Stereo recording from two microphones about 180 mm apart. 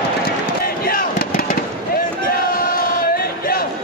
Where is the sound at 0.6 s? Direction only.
55° left (ahead or behind).